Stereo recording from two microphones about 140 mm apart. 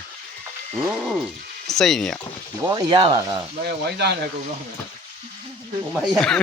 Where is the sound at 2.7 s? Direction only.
30° right (ahead or behind).